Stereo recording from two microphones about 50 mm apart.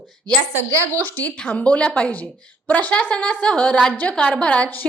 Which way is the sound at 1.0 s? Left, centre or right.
Left.